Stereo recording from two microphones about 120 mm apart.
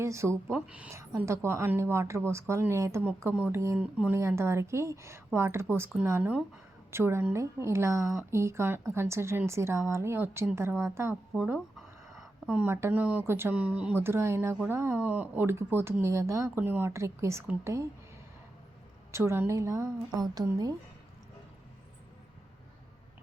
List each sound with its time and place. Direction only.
0.0 s speech: 20° right (ahead or behind)
0.5 s a woman's voice: 10° right (ahead or behind)
0.9 s a woman's voice: 20° right (ahead or behind)
3.8 s a woman's voice: 10° right (ahead or behind)
4.1 s a woman's voice: 20° right (ahead or behind)
12.1 s a sound: centre (ahead or behind)
12.5 s speech: 20° right (ahead or behind)
19.1 s speech: 20° right (ahead or behind)